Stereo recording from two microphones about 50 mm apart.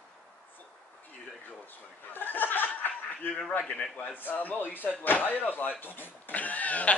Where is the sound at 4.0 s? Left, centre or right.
Left.